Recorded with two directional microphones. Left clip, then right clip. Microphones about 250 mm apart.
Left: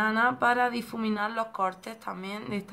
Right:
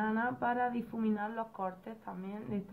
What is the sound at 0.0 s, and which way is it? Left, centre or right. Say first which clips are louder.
Speech: left 9 dB; centre.